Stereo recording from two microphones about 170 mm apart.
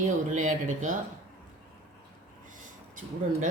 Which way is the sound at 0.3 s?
50° right (ahead or behind).